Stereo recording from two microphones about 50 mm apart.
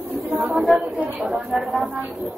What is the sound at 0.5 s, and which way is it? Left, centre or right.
Speech, centre.